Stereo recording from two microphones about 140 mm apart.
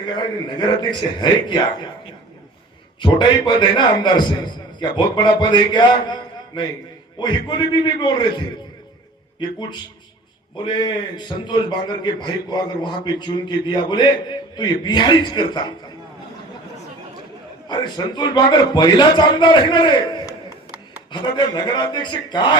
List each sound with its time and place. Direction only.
0.8 s a man's voice: 35° left (ahead or behind)
10.6 s a man's voice: 35° left (ahead or behind)
17.7 s a man's voice: 30° left (ahead or behind)